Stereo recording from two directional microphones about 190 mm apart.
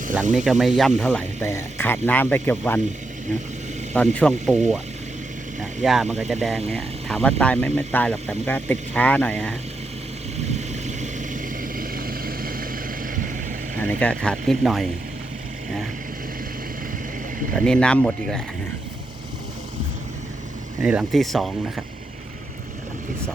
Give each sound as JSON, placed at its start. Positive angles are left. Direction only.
{"t": 0.3, "sound": "speech", "side_deg": 0}
{"t": 3.9, "sound": "speech", "side_deg": 5}
{"t": 5.8, "sound": "speech", "side_deg": 0}
{"t": 10.8, "sound": "vehicle", "side_deg": -40}
{"t": 13.7, "sound": "speech", "side_deg": 10}
{"t": 17.5, "sound": "speech", "side_deg": 5}
{"t": 20.8, "sound": "speech", "side_deg": -5}